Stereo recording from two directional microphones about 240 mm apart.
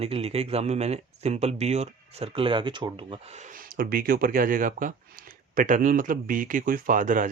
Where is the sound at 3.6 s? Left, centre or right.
Right.